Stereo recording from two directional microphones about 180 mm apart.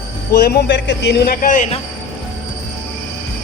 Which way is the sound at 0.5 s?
75° left (ahead or behind).